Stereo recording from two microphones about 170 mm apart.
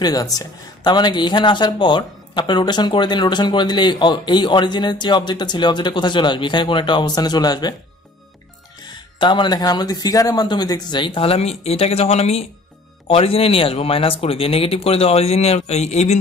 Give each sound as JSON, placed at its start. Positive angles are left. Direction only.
{"t": 0.0, "sound": "speech", "side_deg": 20}
{"t": 8.8, "sound": "speech", "side_deg": 25}